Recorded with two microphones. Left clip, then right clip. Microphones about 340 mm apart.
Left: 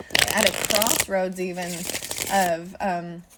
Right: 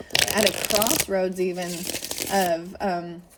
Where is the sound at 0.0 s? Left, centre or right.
Centre.